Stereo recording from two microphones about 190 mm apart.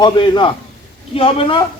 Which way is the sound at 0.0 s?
25° left (ahead or behind).